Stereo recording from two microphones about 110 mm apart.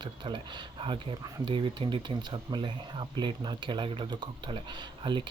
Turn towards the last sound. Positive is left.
turn(degrees=-45)  # may be behind; listen again after turning